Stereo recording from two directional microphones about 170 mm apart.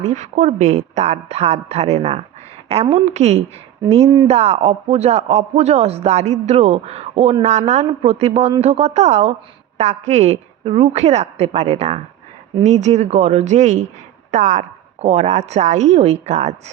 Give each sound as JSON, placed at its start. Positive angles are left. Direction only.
{"t": 0.0, "sound": "speech", "side_deg": -45}